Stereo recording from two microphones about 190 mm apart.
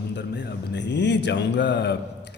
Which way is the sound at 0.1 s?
65° left (ahead or behind).